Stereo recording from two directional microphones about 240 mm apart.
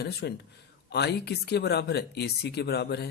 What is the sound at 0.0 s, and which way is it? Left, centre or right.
Speech, left.